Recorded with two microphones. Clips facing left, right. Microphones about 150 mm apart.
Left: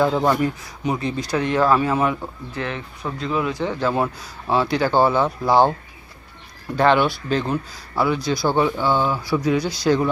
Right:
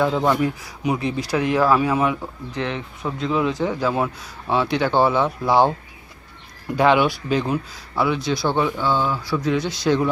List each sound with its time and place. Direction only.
0.0 s speech: centre (ahead or behind)
2.5 s speech: 15° right (ahead or behind)
3.8 s speech: centre (ahead or behind)
6.7 s speech: 10° right (ahead or behind)